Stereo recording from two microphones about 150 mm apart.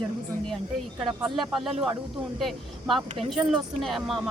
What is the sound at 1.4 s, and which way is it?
Speech, centre (ahead or behind).